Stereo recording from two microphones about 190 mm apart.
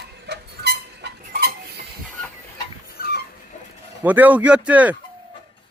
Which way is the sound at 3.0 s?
55° left (ahead or behind).